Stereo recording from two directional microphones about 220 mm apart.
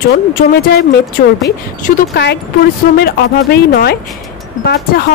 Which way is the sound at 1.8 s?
45° left (ahead or behind).